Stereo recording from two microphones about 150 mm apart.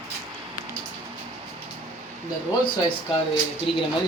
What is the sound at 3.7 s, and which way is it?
Speech, 40° left (ahead or behind).